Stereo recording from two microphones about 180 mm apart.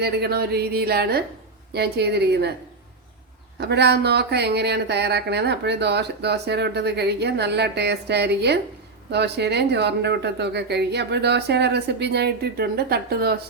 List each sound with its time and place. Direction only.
0.0 s speech: 60° right (ahead or behind)
3.6 s speech: 70° right (ahead or behind)